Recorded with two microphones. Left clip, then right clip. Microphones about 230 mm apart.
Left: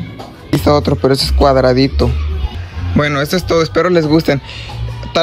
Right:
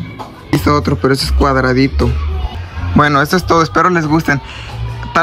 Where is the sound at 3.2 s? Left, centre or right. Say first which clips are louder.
Right 2 dB; right.